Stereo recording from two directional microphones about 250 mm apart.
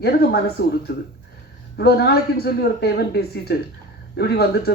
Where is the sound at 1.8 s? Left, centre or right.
Left.